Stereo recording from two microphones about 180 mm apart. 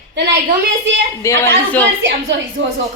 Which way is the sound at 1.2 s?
15° left (ahead or behind).